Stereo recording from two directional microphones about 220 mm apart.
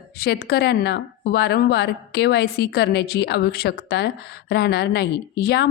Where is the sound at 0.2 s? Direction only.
45° left (ahead or behind).